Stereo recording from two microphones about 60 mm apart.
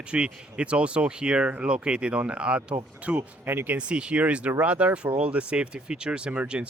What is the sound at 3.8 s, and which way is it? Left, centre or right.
Speech, centre.